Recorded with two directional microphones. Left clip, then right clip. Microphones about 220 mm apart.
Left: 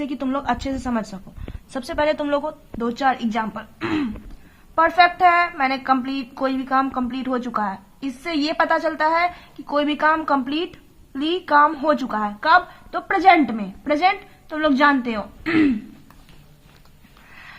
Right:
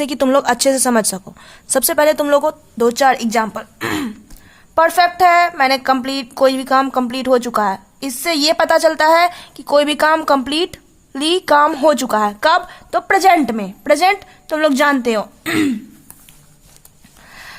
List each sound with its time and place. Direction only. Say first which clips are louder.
0.0 s speech: right 11 dB; 55° right (ahead or behind)
17.3 s sniff: right 6 dB; 55° right (ahead or behind)